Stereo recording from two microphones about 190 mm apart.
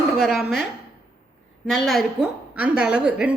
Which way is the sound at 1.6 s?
Centre (ahead or behind).